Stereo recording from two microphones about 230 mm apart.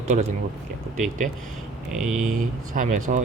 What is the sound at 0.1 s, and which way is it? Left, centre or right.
Speech, right.